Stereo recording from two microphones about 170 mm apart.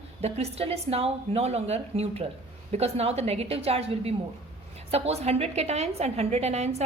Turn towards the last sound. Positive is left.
turn(degrees=-40)  # may be behind; listen again after turning